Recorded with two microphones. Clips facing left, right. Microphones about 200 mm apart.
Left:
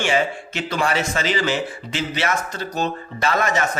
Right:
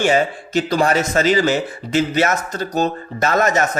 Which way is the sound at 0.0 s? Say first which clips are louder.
Right 4 dB; 40° right (ahead or behind).